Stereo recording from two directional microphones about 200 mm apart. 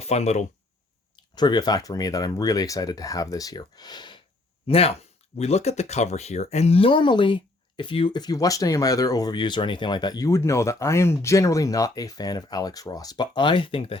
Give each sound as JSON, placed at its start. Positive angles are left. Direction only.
{"t": 0.0, "sound": "speech", "side_deg": 30}
{"t": 1.1, "sound": "speech", "side_deg": 20}